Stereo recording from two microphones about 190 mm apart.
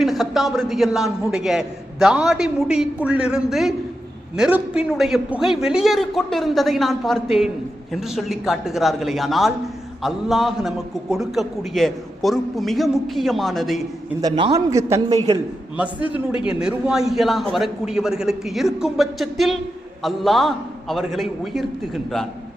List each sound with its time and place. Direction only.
0.0 s a man's voice: centre (ahead or behind)
14.2 s a man's voice: 25° right (ahead or behind)
16.0 s a man's voice: 25° left (ahead or behind)
16.4 s a man's voice: 5° right (ahead or behind)